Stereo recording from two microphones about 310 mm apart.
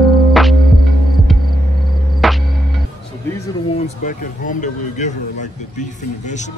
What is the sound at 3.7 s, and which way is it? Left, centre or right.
Speech, left.